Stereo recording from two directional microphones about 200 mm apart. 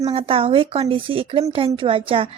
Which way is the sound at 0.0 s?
30° right (ahead or behind).